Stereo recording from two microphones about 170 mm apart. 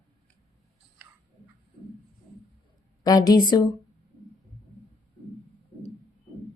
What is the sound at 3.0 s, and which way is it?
Speech, 20° left (ahead or behind).